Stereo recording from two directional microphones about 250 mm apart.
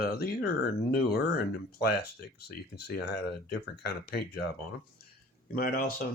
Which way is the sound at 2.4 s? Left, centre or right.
Left.